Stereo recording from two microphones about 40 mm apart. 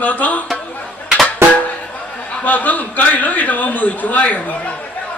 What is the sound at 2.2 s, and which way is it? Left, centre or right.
A man's voice, left.